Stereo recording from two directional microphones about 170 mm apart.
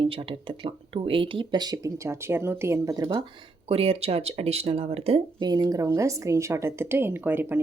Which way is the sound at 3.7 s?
35° right (ahead or behind).